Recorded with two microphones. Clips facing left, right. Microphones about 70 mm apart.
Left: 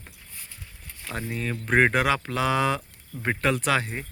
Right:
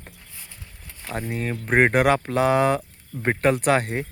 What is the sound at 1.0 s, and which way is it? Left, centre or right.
Speech, right.